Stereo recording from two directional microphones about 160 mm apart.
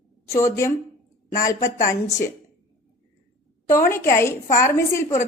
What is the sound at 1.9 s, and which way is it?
Speech, 20° left (ahead or behind).